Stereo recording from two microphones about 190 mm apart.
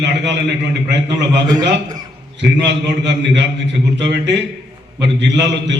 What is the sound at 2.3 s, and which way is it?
A man's voice, 70° right (ahead or behind).